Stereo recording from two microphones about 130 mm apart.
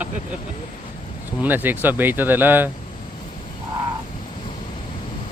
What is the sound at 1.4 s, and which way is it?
Speech, 15° right (ahead or behind).